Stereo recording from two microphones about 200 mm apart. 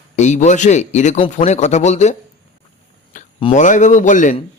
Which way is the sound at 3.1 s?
30° left (ahead or behind).